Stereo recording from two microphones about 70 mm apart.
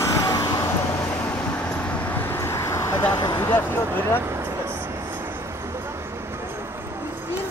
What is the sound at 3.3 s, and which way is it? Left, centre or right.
Speech, left.